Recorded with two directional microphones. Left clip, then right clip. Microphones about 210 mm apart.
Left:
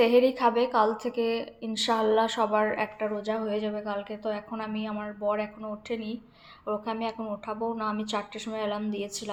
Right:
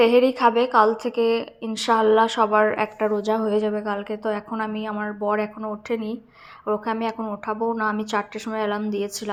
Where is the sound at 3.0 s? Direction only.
35° right (ahead or behind).